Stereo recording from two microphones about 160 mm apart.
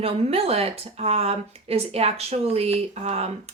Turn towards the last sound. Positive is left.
turn(degrees=-40)  # may be behind; listen again after turning